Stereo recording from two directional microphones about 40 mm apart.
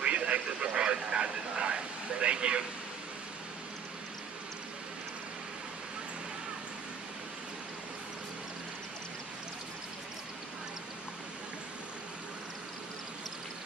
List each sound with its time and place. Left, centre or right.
0.0 s radio: right